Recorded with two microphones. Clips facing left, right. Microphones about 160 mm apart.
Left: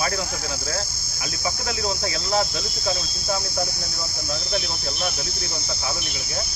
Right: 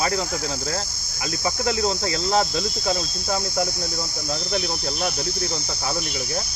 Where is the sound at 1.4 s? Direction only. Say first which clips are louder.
Right 5 dB; 45° right (ahead or behind).